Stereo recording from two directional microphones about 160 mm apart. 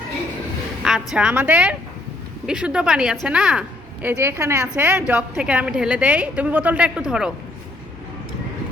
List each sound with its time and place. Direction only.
0.8 s a woman's voice: 5° right (ahead or behind)
4.0 s a woman's voice: 15° right (ahead or behind)